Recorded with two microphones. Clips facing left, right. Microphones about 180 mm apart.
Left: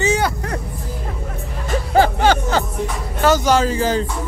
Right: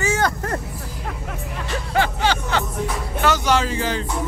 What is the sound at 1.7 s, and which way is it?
Music, 40° left (ahead or behind).